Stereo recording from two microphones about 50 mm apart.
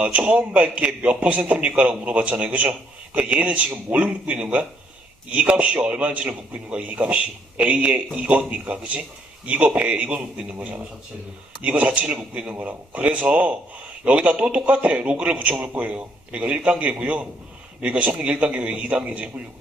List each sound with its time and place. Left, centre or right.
0.0 s a man's voice: right